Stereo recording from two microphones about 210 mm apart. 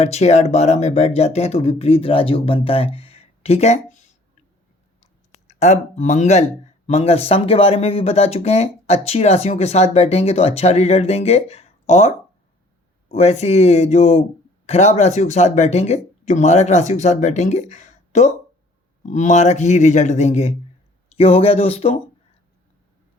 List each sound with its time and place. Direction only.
0.0 s speech: 30° left (ahead or behind)
5.3 s speech: 35° left (ahead or behind)